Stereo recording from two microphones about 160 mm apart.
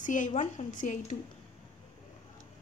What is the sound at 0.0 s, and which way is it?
A woman's voice, 50° left (ahead or behind).